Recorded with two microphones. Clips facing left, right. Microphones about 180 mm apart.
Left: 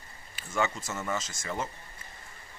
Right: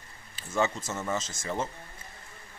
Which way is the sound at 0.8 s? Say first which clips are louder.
Right 1 dB; centre (ahead or behind).